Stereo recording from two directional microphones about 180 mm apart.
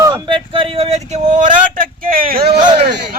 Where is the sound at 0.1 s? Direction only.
25° right (ahead or behind); by 2.4 s 55° right (ahead or behind).